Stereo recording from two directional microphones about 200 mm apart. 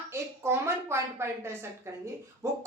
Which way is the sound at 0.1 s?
15° right (ahead or behind).